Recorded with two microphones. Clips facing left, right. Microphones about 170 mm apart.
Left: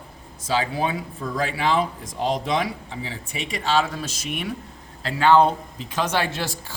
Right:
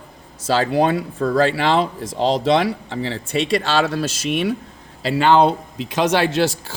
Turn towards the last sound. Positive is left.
turn(degrees=-80)